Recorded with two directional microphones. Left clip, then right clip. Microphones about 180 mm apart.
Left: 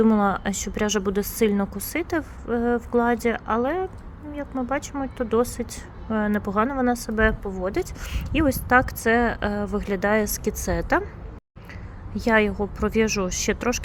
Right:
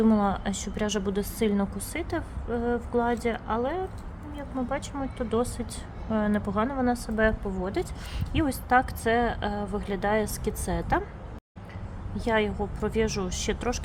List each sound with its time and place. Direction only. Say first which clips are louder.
0.0 s a woman's voice: left 4 dB; 25° left (ahead or behind)
12.1 s a woman's voice: left 6 dB; 25° left (ahead or behind)